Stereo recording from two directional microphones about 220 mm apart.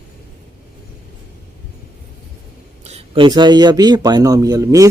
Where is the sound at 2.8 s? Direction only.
25° right (ahead or behind).